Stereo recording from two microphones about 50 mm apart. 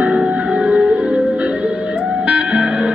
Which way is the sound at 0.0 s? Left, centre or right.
Right.